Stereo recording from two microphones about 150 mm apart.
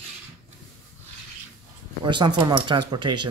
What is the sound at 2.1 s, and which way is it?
Speech, 30° right (ahead or behind).